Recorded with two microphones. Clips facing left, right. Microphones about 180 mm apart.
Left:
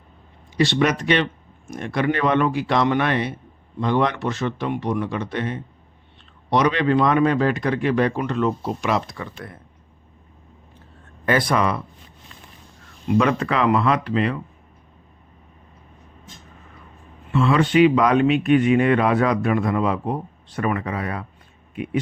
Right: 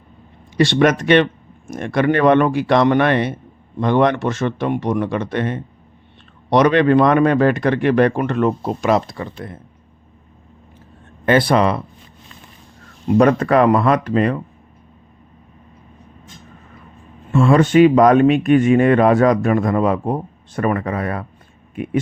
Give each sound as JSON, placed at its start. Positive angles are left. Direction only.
{"t": 0.5, "sound": "a man's voice", "side_deg": -55}
{"t": 11.3, "sound": "speech", "side_deg": -30}
{"t": 13.1, "sound": "speech", "side_deg": -45}
{"t": 17.3, "sound": "speech", "side_deg": -45}